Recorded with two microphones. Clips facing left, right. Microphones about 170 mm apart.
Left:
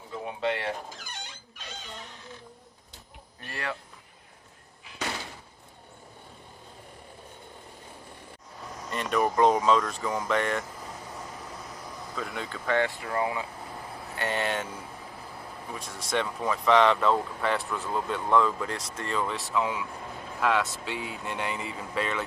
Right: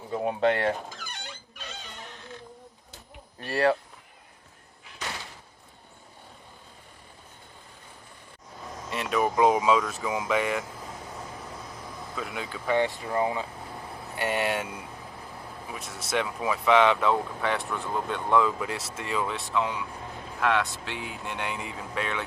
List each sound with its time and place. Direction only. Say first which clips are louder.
0.1 s speech: right 6 dB; 50° right (ahead or behind)
3.5 s speech: right 12 dB; 35° right (ahead or behind)
8.9 s speech: even; 5° right (ahead or behind)
12.1 s speech: even; 5° right (ahead or behind); by 13.4 s 20° right (ahead or behind)
14.2 s speech: right 2 dB; 10° right (ahead or behind)